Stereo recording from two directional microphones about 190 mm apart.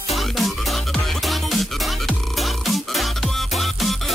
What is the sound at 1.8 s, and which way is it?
Music, centre (ahead or behind).